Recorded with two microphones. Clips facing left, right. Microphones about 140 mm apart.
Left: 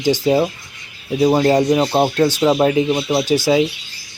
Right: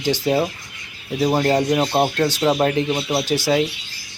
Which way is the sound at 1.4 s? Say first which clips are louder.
Left 4 dB; 20° left (ahead or behind).